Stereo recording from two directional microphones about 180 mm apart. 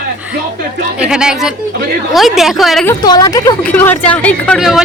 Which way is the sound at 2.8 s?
20° left (ahead or behind).